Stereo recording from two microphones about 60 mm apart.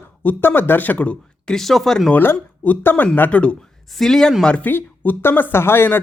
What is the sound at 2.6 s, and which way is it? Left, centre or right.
Speech, left.